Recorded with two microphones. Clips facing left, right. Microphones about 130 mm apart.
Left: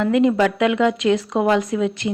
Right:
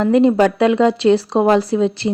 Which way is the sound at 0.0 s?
35° right (ahead or behind).